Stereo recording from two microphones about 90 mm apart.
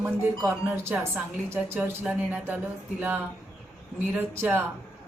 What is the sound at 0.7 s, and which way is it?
A woman's voice, 25° right (ahead or behind).